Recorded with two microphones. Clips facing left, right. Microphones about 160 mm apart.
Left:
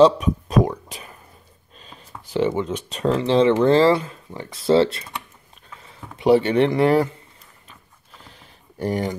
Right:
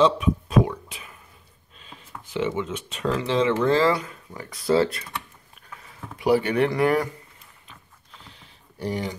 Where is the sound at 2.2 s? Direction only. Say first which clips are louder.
Left 5 dB; 35° left (ahead or behind).